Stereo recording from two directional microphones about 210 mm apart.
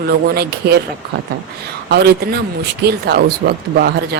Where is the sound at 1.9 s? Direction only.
50° right (ahead or behind).